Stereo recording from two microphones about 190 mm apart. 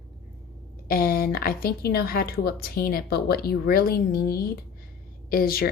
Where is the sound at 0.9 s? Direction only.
50° left (ahead or behind).